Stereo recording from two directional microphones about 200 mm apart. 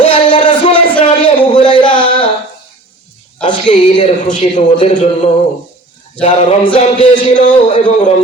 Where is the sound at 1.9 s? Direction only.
25° left (ahead or behind).